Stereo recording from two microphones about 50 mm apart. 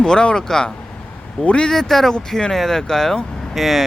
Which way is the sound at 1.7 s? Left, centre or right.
Centre.